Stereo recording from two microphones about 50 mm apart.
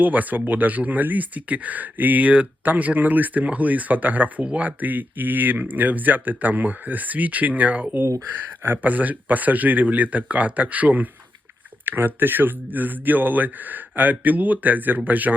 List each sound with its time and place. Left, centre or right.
0.0 s speech: right
8.6 s speech: right
8.9 s speech: right
11.9 s speech: right